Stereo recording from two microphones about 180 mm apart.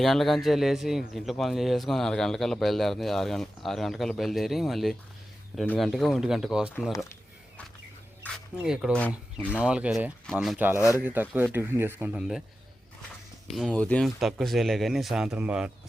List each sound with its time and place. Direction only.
0.0 s speech: centre (ahead or behind)
6.9 s speech: 15° left (ahead or behind)
8.2 s speech: 5° right (ahead or behind)
9.5 s speech: 5° right (ahead or behind)
13.5 s speech: centre (ahead or behind)